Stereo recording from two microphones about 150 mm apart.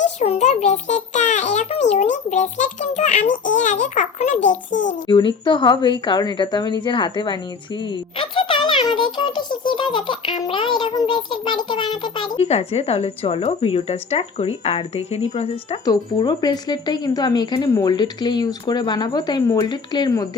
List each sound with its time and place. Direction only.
0.0 s a child's voice: 50° left (ahead or behind)
5.0 s a woman's voice: 30° left (ahead or behind)
12.4 s a woman's voice: 45° left (ahead or behind)
15.9 s speech: 30° left (ahead or behind)